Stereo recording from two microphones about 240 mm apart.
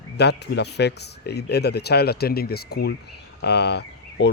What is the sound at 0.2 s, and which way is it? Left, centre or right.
Speech, left.